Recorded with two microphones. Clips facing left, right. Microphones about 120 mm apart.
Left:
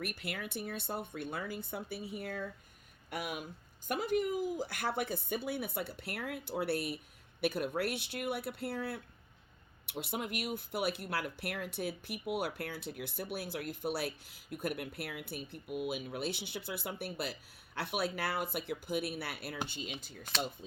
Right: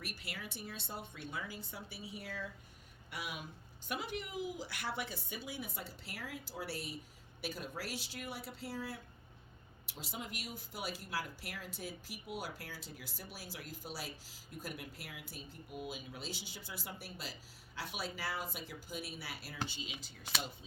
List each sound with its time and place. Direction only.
0.0 s speech: 55° left (ahead or behind)